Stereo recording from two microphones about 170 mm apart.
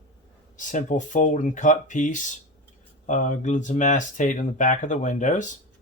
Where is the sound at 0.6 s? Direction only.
50° left (ahead or behind).